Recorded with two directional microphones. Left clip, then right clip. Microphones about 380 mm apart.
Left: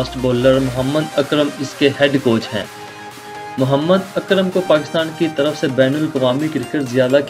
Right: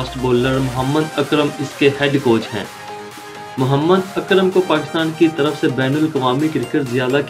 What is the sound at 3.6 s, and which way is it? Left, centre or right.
Speech, left.